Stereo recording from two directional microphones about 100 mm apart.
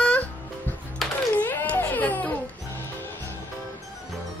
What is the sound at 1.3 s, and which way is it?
Baby cry, 20° left (ahead or behind).